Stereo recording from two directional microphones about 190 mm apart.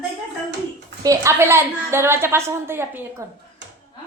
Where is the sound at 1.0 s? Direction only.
15° right (ahead or behind).